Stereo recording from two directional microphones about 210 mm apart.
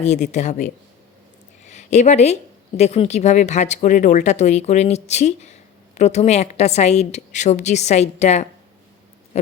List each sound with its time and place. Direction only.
0.0 s speech: 35° left (ahead or behind)